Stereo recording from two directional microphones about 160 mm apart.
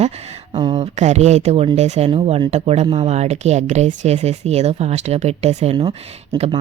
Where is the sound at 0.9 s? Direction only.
45° right (ahead or behind).